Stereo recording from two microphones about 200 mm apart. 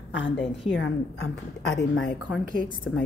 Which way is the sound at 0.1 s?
65° left (ahead or behind).